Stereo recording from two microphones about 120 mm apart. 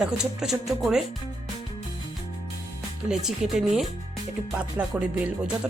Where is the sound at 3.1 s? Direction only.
5° right (ahead or behind).